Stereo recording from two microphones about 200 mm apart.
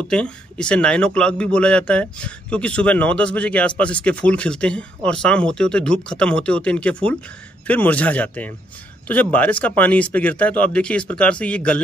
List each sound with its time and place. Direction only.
0.1 s a man's voice: 5° left (ahead or behind)